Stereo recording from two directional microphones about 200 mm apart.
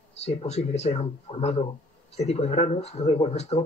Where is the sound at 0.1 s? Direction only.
30° left (ahead or behind).